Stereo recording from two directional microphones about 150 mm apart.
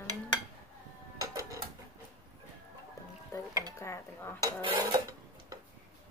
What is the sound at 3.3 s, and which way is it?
Speech, 20° left (ahead or behind).